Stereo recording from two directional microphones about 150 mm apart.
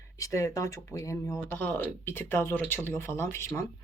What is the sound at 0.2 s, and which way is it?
Speech, 20° left (ahead or behind).